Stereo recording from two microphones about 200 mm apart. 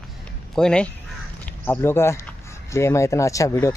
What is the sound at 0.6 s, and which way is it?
Speech, 5° left (ahead or behind).